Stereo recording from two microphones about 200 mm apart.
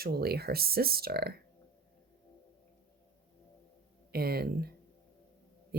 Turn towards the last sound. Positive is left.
turn(degrees=-50)  # may be behind; listen again after turning